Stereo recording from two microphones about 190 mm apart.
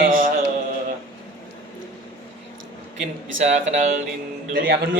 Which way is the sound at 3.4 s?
35° right (ahead or behind).